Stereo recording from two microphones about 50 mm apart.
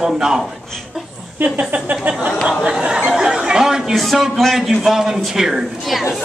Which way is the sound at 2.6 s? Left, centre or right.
Centre.